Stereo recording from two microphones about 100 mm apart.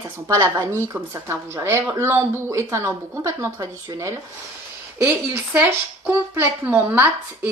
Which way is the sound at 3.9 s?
40° right (ahead or behind).